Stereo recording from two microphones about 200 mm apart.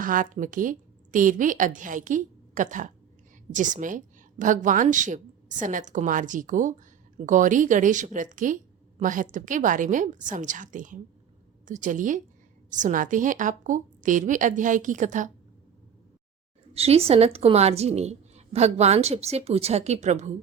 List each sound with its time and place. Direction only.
0.0 s a woman's voice: 40° right (ahead or behind)
16.7 s a woman's voice: 30° right (ahead or behind)